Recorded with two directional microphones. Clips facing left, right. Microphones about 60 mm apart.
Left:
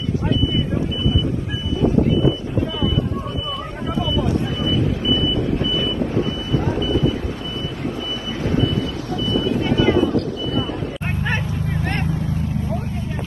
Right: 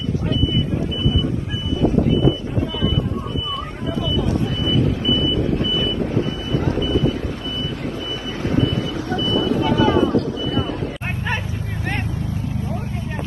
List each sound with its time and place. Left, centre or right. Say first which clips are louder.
9.1 s vehicle: right 1 dB; right